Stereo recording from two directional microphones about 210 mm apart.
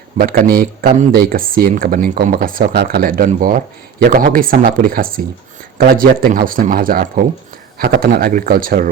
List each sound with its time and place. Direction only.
0.2 s speech: 45° right (ahead or behind)